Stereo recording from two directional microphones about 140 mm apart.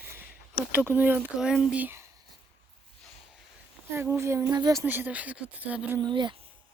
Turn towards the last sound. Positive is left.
turn(degrees=-35)  # may be behind; listen again after turning